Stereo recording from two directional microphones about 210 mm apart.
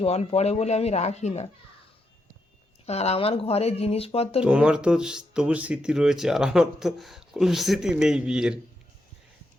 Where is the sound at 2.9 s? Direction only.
30° left (ahead or behind).